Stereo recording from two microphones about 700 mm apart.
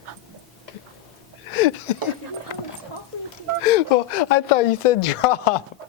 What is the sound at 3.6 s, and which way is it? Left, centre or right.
Speech, left.